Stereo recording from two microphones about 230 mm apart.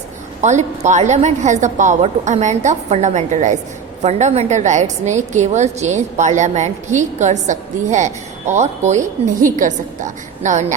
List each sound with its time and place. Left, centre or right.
0.4 s a woman's voice: right